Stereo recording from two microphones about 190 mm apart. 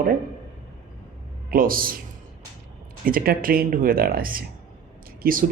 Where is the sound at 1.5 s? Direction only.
50° right (ahead or behind).